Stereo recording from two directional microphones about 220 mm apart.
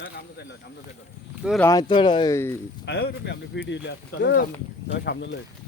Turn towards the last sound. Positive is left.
turn(degrees=50)  # may be behind; listen again after turning